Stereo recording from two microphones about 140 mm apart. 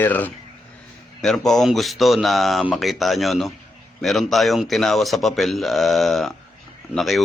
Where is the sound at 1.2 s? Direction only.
Centre (ahead or behind).